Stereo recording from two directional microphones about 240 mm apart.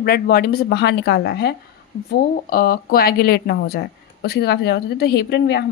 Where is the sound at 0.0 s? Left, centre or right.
Left.